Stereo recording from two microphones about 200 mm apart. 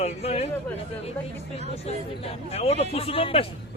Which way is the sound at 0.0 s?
30° left (ahead or behind).